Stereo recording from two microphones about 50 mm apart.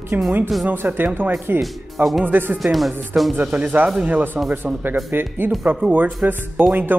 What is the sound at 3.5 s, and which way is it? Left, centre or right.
Speech, right.